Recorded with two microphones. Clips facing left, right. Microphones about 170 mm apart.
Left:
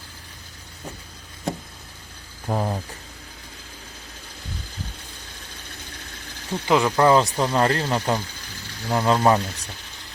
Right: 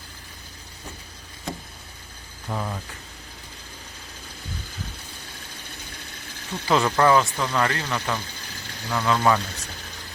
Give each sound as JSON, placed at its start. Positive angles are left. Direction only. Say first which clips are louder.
{"t": 2.5, "sound": "speech", "louder": "left 5 dB", "side_deg": 35}
{"t": 6.7, "sound": "speech", "louder": "left 2 dB", "side_deg": 15}
{"t": 7.1, "sound": "speech", "louder": "left 2 dB", "side_deg": 35}